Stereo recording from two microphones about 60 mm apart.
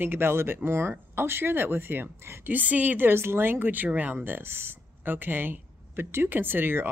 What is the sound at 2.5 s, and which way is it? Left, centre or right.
Speech, right.